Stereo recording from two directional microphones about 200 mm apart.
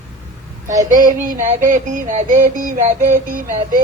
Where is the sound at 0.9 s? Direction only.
45° right (ahead or behind).